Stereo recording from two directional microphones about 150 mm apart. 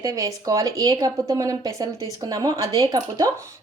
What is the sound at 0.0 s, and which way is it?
Speech, 25° right (ahead or behind).